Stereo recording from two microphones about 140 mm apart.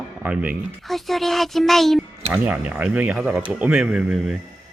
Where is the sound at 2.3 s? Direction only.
10° right (ahead or behind).